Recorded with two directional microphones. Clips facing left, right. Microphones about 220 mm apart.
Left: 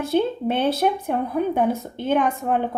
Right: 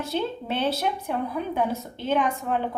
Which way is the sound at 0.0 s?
55° left (ahead or behind).